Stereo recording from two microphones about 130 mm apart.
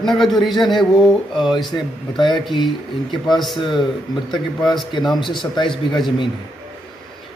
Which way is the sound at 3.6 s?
40° left (ahead or behind).